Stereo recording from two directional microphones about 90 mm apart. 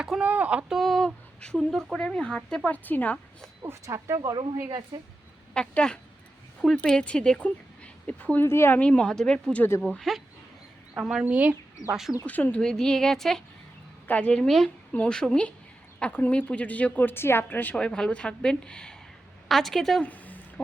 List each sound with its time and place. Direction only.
0.0 s a sound: 10° right (ahead or behind)
0.7 s a woman's voice: centre (ahead or behind); by 3.2 s 20° left (ahead or behind)
3.6 s a woman's voice: 35° right (ahead or behind)
5.5 s a woman's voice: 10° left (ahead or behind)
8.4 s a woman's voice: 30° left (ahead or behind)
8.8 s a woman's voice: 15° left (ahead or behind)
10.0 s a woman's voice: centre (ahead or behind)
11.9 s a woman's voice: 5° right (ahead or behind)
12.2 s a woman's voice: 15° left (ahead or behind)
14.4 s a woman's voice: 5° left (ahead or behind)
20.0 s a sound: 20° left (ahead or behind)